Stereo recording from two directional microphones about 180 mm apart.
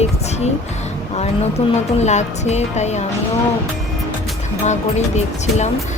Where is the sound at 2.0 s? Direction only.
40° left (ahead or behind).